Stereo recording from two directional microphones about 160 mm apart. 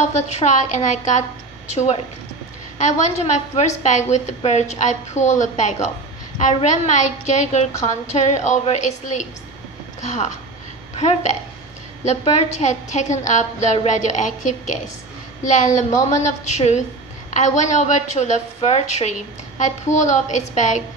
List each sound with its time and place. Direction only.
0.0 s a woman's voice: 45° left (ahead or behind)
2.8 s a woman's voice: 45° left (ahead or behind)